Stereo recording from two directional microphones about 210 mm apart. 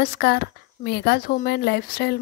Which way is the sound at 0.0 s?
50° left (ahead or behind).